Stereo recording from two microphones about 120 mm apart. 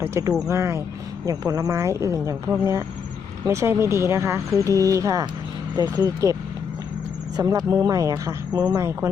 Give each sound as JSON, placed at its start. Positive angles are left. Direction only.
{"t": 0.0, "sound": "speech", "side_deg": -20}
{"t": 7.3, "sound": "speech", "side_deg": -30}